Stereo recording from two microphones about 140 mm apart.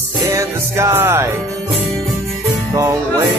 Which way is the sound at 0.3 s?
20° right (ahead or behind).